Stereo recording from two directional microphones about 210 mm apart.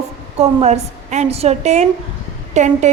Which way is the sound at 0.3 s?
30° right (ahead or behind).